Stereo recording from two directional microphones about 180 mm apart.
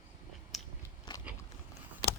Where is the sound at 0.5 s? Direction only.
Centre (ahead or behind).